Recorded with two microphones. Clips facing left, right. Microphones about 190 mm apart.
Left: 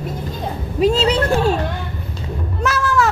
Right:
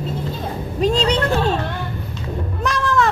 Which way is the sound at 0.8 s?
5° left (ahead or behind).